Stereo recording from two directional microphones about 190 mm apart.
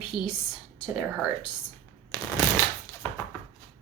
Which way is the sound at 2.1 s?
20° left (ahead or behind).